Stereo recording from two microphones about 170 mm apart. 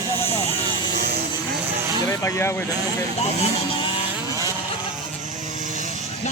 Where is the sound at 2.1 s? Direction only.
20° left (ahead or behind).